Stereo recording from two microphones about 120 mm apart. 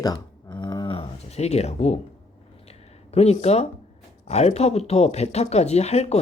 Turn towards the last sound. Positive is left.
turn(degrees=60)  # may be behind; listen again after turning